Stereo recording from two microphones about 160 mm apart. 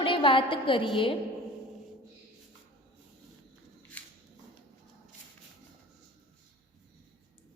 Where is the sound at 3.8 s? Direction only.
10° left (ahead or behind).